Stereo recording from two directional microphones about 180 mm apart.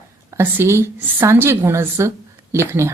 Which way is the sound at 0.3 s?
15° right (ahead or behind).